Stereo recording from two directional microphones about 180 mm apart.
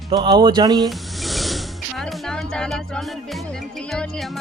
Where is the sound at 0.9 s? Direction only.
Centre (ahead or behind).